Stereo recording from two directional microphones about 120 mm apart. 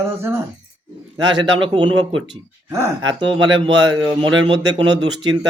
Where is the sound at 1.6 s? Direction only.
45° right (ahead or behind).